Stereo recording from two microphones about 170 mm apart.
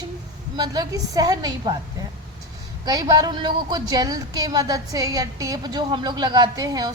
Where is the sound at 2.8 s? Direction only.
20° right (ahead or behind).